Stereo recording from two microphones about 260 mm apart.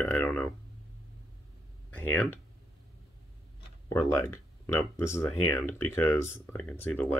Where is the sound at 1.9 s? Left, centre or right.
Centre.